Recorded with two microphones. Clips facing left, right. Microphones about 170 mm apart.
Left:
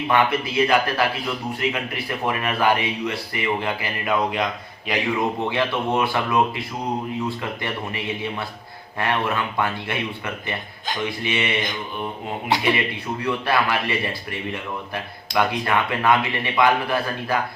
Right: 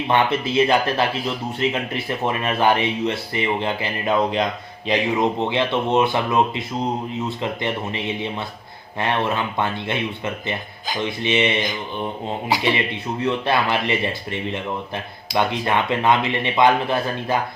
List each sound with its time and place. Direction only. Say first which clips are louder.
0.1 s speech: right 1 dB; 25° right (ahead or behind)
11.2 s speech: right 9 dB; 25° right (ahead or behind)
12.5 s a man's voice: even; centre (ahead or behind)
13.2 s speech: right 2 dB; 25° right (ahead or behind)